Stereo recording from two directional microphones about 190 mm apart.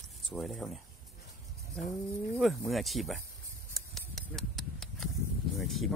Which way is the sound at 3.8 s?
Centre (ahead or behind).